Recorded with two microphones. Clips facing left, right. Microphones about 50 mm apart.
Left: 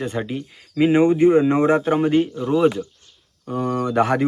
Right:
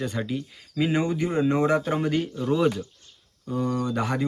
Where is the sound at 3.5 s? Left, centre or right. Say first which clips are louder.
Left 4 dB; left.